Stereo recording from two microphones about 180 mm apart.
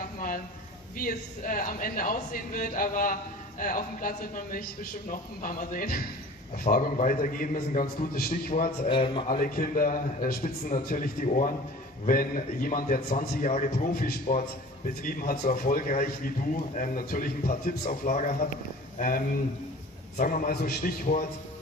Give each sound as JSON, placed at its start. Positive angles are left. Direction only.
{"t": 0.0, "sound": "a sound", "side_deg": 50}
{"t": 0.9, "sound": "a man's voice", "side_deg": 50}
{"t": 8.8, "sound": "a man's voice", "side_deg": 30}
{"t": 9.3, "sound": "a man's voice", "side_deg": 50}